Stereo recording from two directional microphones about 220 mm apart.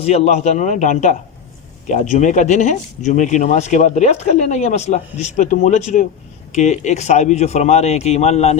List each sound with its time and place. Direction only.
0.0 s speech: 30° left (ahead or behind)